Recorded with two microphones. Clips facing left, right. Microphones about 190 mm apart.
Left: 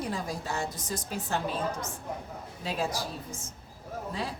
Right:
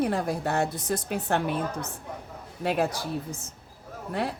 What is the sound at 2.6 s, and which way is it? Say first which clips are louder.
Speech: right 6 dB; 60° right (ahead or behind).